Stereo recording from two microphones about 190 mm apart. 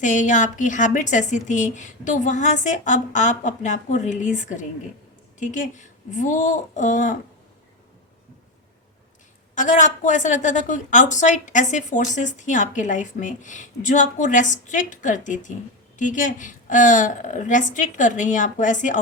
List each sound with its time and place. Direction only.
0.0 s a woman's voice: 40° left (ahead or behind)
9.6 s a woman's voice: 40° left (ahead or behind)